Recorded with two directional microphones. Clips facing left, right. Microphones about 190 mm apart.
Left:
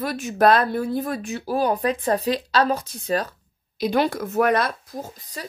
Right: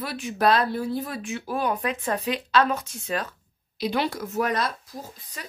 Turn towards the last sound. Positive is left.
turn(degrees=35)  # may be behind; listen again after turning